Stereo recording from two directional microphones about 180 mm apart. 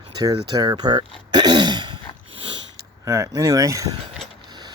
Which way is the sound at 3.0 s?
20° right (ahead or behind).